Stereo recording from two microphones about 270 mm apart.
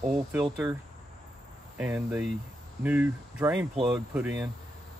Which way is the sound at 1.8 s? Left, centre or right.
Centre.